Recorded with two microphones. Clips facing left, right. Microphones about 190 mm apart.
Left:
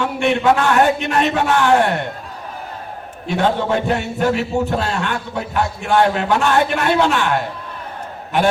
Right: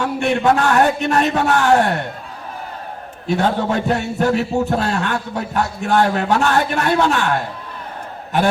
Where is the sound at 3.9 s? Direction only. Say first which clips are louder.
Right 1 dB; 40° right (ahead or behind).